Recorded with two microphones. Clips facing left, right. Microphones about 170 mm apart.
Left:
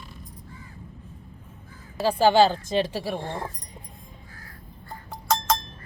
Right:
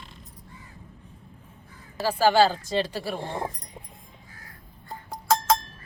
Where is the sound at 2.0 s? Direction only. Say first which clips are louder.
Left 2 dB; 20° left (ahead or behind).